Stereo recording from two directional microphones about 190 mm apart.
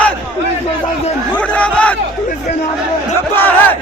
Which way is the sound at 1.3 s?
5° left (ahead or behind).